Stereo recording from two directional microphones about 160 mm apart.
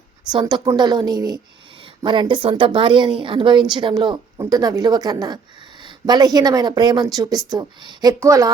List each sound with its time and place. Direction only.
0.3 s speech: 25° right (ahead or behind)